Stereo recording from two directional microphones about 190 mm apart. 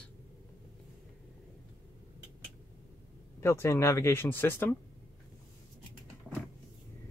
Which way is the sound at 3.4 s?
15° left (ahead or behind).